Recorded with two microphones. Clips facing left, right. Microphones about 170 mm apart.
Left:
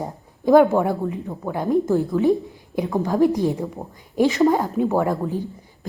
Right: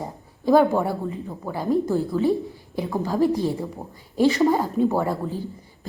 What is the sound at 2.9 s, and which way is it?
Speech, centre (ahead or behind).